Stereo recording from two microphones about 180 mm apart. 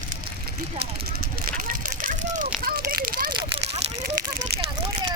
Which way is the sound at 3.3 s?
35° right (ahead or behind).